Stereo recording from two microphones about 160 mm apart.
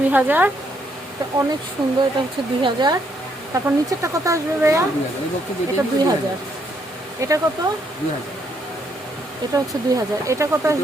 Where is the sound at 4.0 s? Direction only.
20° right (ahead or behind).